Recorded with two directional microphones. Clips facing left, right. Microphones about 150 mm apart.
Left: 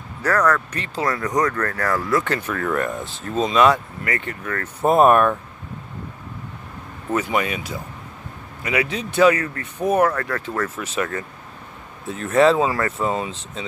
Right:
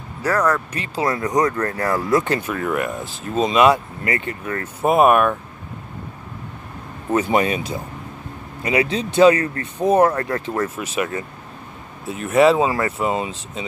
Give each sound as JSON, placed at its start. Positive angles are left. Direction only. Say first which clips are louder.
{"t": 0.2, "sound": "speech", "louder": "even", "side_deg": -10}
{"t": 4.8, "sound": "speech", "louder": "even", "side_deg": -10}
{"t": 7.1, "sound": "speech", "louder": "right 4 dB", "side_deg": -30}